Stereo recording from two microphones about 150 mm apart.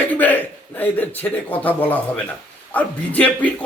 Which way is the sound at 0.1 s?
10° left (ahead or behind).